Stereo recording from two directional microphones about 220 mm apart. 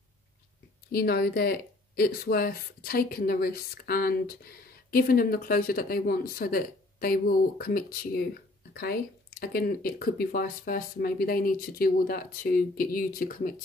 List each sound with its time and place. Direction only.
0.9 s a woman's voice: 45° left (ahead or behind)